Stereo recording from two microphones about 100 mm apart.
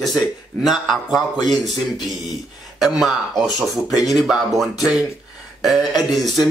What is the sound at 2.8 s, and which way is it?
Speech, centre (ahead or behind).